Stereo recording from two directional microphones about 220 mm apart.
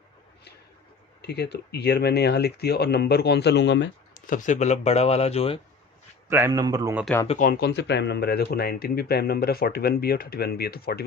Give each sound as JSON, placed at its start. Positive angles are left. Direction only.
{"t": 1.2, "sound": "speech", "side_deg": 50}
{"t": 4.3, "sound": "speech", "side_deg": 35}
{"t": 6.2, "sound": "a man's voice", "side_deg": -10}
{"t": 7.0, "sound": "speech", "side_deg": 10}
{"t": 7.3, "sound": "speech", "side_deg": 35}